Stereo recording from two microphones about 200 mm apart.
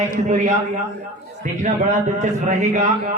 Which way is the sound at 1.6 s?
35° right (ahead or behind).